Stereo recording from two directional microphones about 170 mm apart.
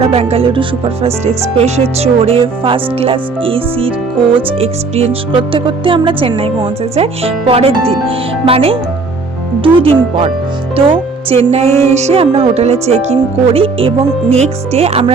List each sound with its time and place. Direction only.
0.0 s speech: 35° right (ahead or behind)